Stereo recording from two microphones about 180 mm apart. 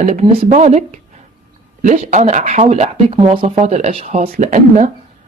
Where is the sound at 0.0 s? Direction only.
35° right (ahead or behind).